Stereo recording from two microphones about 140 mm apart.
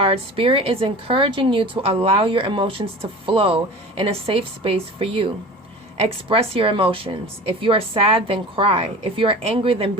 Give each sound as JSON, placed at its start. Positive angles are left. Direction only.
{"t": 0.0, "sound": "a woman's voice", "side_deg": -40}